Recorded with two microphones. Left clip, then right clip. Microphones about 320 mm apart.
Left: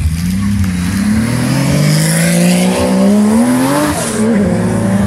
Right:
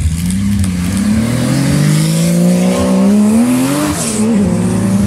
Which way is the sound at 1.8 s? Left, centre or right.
Centre.